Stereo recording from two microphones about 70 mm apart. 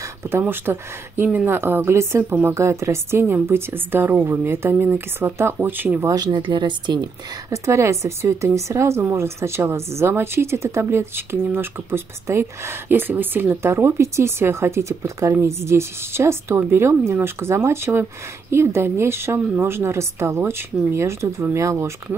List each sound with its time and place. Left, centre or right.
0.5 s speech: right
6.1 s speech: right
7.4 s speech: right